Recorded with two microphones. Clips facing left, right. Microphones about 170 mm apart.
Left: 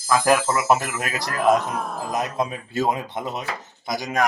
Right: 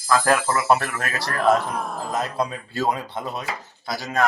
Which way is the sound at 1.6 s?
Centre (ahead or behind).